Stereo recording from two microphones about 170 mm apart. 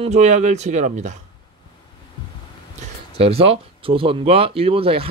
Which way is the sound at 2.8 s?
35° right (ahead or behind).